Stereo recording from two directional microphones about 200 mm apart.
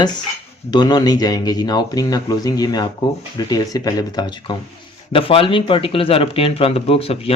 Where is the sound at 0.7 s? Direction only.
20° left (ahead or behind).